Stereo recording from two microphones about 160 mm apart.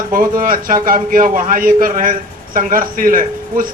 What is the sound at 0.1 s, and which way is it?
A man's voice, 65° right (ahead or behind).